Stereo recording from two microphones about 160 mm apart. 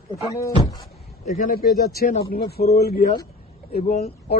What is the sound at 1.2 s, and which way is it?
Speech, 50° left (ahead or behind).